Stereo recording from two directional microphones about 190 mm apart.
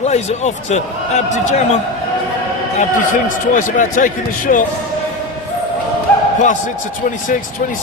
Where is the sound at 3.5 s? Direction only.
45° left (ahead or behind).